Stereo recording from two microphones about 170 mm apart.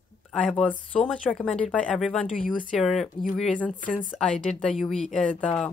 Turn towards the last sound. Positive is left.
turn(degrees=5)  # may be behind; listen again after turning